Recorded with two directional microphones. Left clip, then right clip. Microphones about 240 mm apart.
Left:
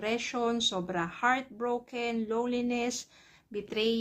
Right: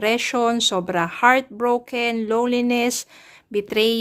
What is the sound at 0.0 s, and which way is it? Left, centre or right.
Speech, right.